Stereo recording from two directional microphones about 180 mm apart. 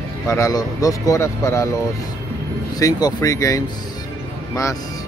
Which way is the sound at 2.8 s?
20° left (ahead or behind).